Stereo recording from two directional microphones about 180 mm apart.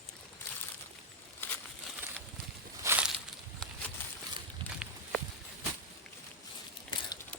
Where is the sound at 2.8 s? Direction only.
5° right (ahead or behind).